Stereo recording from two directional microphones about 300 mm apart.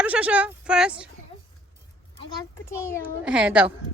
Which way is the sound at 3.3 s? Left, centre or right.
Centre.